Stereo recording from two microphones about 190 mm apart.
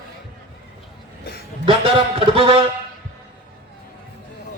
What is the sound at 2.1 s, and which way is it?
Speech, 30° right (ahead or behind).